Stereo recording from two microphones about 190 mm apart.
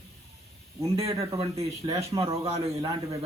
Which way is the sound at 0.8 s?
30° right (ahead or behind).